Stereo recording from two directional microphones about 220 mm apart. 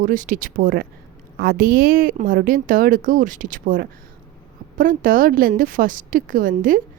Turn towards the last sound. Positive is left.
turn(degrees=-40)  # may be behind; listen again after turning